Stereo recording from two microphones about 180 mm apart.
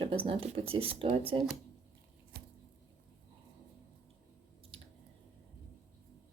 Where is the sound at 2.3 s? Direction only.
65° right (ahead or behind).